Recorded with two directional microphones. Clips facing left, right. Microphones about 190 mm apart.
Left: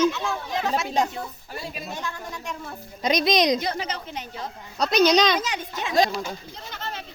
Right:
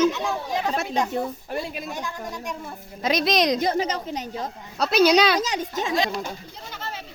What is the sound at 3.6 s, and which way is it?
Speech, 40° right (ahead or behind).